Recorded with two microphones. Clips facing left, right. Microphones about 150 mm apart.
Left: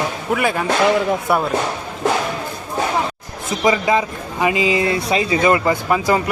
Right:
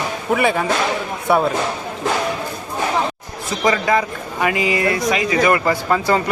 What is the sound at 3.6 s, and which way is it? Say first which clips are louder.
Speech: left 1 dB; 15° left (ahead or behind).